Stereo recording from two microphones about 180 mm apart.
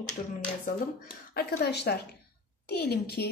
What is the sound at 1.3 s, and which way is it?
A woman's voice, 60° left (ahead or behind).